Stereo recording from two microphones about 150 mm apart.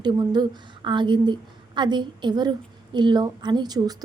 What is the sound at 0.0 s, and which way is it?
A woman's voice, 30° right (ahead or behind).